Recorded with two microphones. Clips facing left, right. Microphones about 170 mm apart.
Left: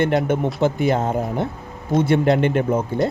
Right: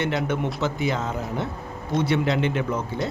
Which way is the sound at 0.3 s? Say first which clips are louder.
Left 6 dB; 50° left (ahead or behind).